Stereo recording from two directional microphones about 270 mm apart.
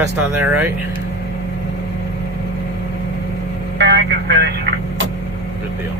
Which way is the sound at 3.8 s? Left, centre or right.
Right.